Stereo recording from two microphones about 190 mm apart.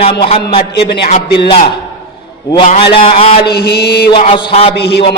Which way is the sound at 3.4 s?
60° left (ahead or behind).